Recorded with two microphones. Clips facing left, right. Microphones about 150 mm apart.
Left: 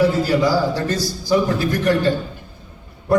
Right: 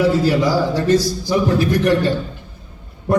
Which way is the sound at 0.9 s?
20° right (ahead or behind).